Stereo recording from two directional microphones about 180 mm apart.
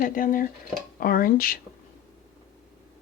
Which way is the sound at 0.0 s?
50° left (ahead or behind).